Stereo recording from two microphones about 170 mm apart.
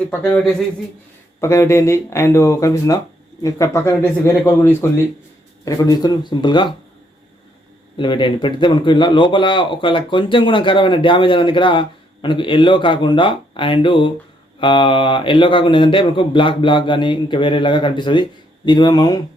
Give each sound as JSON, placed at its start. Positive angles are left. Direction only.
{"t": 0.1, "sound": "a man's voice", "side_deg": 10}
{"t": 7.9, "sound": "a man's voice", "side_deg": 30}